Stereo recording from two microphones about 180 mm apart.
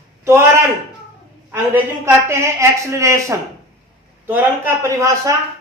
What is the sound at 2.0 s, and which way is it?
A woman's voice, 15° right (ahead or behind).